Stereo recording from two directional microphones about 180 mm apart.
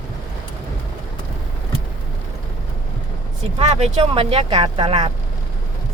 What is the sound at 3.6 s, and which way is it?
Speech, 35° right (ahead or behind).